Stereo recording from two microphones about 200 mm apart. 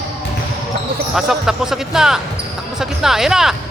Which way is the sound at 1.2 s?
Centre (ahead or behind).